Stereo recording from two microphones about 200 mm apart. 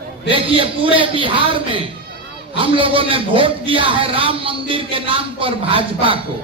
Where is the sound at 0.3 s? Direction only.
25° right (ahead or behind).